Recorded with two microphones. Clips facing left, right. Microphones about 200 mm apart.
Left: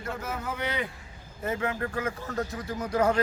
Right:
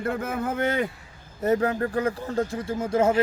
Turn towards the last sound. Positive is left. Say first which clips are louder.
# right 4 dB
turn(degrees=-25)  # may be behind; listen again after turning